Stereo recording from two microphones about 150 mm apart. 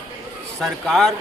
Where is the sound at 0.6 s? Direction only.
5° left (ahead or behind).